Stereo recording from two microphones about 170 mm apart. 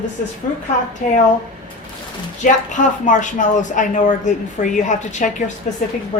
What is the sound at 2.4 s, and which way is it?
Speech, 50° left (ahead or behind).